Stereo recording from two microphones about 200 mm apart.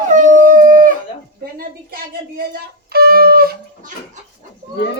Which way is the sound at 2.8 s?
50° right (ahead or behind).